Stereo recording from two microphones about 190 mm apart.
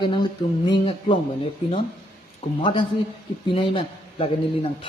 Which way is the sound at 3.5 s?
30° left (ahead or behind).